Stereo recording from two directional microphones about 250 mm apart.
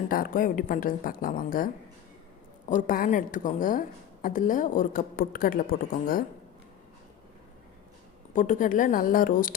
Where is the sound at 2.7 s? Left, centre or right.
Left.